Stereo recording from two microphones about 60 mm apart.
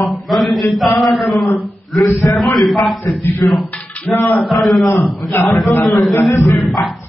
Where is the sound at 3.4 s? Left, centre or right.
Left.